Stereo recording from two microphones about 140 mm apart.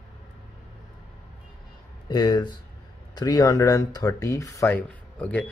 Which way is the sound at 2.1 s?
30° left (ahead or behind).